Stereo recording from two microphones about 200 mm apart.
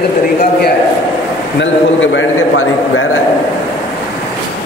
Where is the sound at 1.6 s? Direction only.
70° left (ahead or behind).